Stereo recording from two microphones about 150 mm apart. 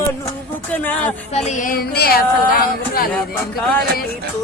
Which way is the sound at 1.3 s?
55° left (ahead or behind).